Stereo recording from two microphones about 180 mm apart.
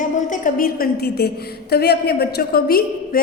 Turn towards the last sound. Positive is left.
turn(degrees=55)  # may be behind; listen again after turning